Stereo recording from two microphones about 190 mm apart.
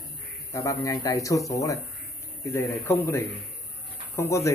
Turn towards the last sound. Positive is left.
turn(degrees=15)  # may be behind; listen again after turning